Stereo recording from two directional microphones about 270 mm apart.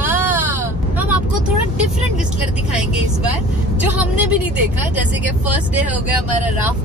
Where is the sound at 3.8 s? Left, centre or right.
Centre.